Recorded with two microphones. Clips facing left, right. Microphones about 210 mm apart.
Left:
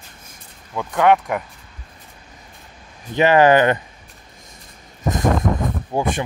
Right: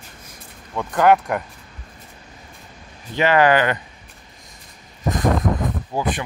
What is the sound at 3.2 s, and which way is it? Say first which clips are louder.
Speech: left 3 dB; 20° left (ahead or behind).